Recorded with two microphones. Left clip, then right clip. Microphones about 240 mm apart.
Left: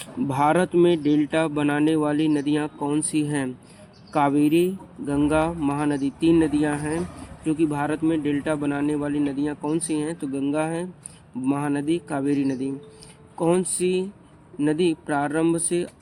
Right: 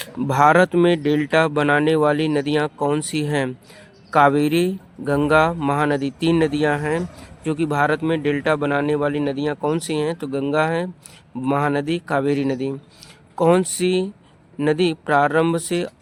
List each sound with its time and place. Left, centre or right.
0.0 s speech: right